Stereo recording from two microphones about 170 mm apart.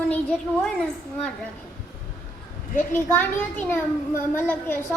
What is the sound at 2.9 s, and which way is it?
A child's voice, 10° left (ahead or behind).